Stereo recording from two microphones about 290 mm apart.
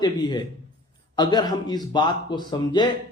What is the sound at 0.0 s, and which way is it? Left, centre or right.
A man's voice, centre.